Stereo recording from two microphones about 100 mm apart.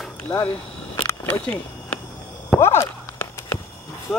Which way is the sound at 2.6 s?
25° left (ahead or behind).